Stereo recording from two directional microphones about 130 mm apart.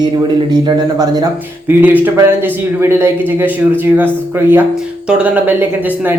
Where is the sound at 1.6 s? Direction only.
15° right (ahead or behind).